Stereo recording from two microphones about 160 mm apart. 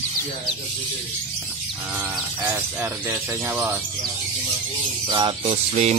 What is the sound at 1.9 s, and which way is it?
Speech, 10° right (ahead or behind).